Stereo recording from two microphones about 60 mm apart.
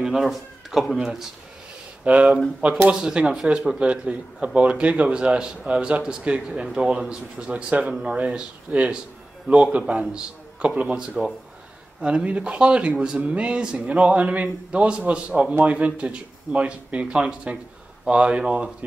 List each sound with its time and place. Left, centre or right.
0.1 s a man's voice: centre
2.1 s a man's voice: right
8.2 s a man's voice: right